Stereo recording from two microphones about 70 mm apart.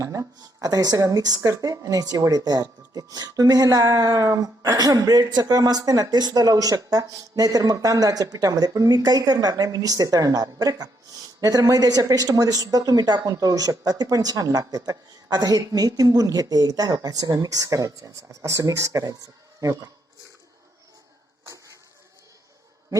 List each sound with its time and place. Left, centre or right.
0.0 s speech: right
19.6 s speech: right